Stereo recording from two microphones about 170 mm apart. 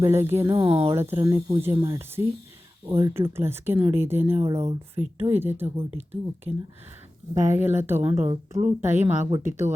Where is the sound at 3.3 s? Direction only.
15° right (ahead or behind).